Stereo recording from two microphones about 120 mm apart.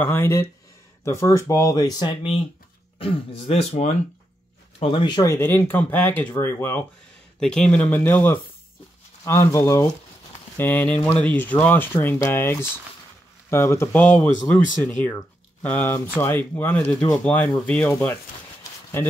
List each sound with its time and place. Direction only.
0.0 s speech: 20° left (ahead or behind); by 2.3 s 35° left (ahead or behind)
3.0 s speech: 50° left (ahead or behind)
3.7 s speech: 65° left (ahead or behind)
4.7 s speech: 50° left (ahead or behind)
5.2 s speech: 20° left (ahead or behind)
7.3 s speech: 5° left (ahead or behind); by 9.8 s 25° left (ahead or behind)
10.6 s speech: 15° left (ahead or behind)
18.6 s a sound: 20° left (ahead or behind)